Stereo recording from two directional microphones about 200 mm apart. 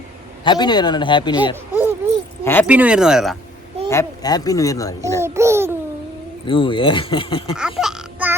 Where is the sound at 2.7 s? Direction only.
5° right (ahead or behind).